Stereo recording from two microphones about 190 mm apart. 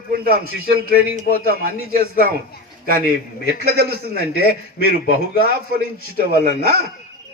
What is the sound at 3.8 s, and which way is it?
Speech, 55° right (ahead or behind).